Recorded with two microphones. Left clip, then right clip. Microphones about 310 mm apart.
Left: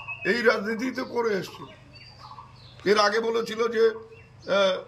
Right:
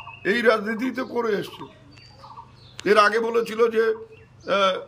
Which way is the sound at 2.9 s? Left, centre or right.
Centre.